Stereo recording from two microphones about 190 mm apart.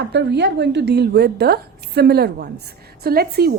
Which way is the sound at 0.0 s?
65° right (ahead or behind).